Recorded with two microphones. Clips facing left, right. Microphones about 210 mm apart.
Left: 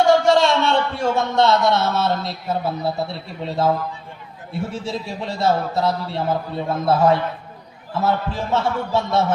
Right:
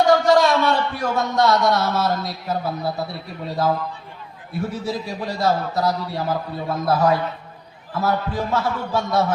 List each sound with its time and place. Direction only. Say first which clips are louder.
0.0 s a man's voice: even; 25° left (ahead or behind)